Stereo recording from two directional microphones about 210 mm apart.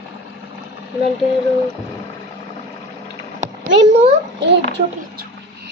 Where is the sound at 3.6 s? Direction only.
60° right (ahead or behind).